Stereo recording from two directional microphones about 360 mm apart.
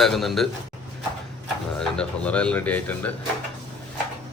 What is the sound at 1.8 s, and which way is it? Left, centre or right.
A man's voice, centre.